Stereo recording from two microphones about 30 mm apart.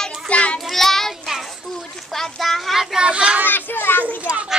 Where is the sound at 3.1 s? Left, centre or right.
Right.